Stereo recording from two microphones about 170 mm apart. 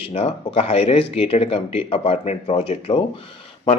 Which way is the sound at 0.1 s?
35° left (ahead or behind).